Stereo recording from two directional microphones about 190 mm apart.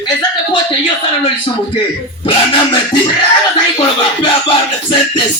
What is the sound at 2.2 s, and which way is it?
Music, 30° left (ahead or behind).